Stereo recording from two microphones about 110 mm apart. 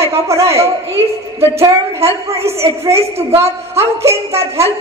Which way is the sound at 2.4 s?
65° right (ahead or behind).